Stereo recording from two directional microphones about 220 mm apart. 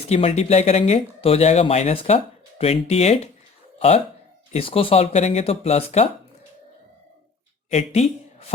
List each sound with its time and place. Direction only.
0.1 s speech: 30° left (ahead or behind)
7.7 s speech: 30° left (ahead or behind)